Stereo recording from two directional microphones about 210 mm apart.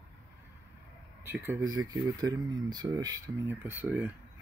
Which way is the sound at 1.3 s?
15° right (ahead or behind).